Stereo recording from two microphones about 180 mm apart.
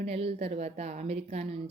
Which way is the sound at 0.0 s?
35° right (ahead or behind).